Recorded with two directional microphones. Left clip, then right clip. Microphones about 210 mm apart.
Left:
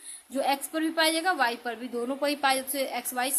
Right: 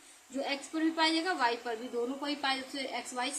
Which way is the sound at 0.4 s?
55° left (ahead or behind).